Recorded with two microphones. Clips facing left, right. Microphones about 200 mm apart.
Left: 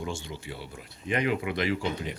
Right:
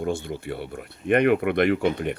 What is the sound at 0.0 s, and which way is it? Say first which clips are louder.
Speech: right 8 dB; 55° right (ahead or behind).